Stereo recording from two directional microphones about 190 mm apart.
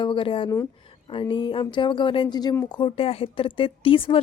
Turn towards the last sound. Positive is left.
turn(degrees=30)  # may be behind; listen again after turning